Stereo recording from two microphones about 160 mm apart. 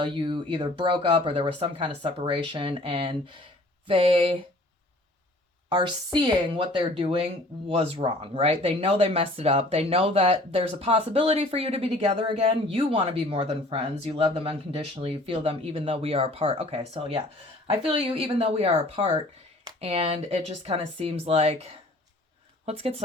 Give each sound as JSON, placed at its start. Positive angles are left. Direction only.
{"t": 0.0, "sound": "speech", "side_deg": -30}
{"t": 5.6, "sound": "speech", "side_deg": -30}